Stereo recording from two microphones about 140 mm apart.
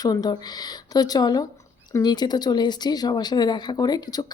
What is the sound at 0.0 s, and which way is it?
Speech, 30° left (ahead or behind).